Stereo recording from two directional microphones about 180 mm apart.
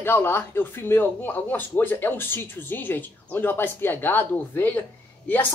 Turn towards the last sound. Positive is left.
turn(degrees=10)  # may be behind; listen again after turning